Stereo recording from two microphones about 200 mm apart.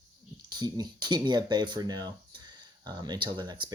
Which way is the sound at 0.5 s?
20° right (ahead or behind).